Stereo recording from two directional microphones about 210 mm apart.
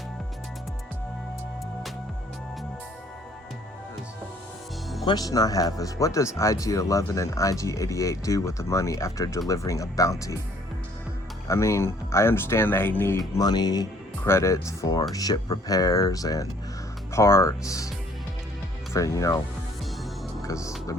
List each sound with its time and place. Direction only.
5.0 s speech: 20° left (ahead or behind)
11.4 s speech: 15° left (ahead or behind)
18.9 s speech: 15° left (ahead or behind)
20.5 s speech: 15° left (ahead or behind)